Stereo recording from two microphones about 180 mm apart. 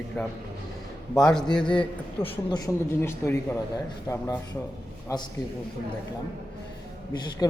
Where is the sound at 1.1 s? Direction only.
5° left (ahead or behind).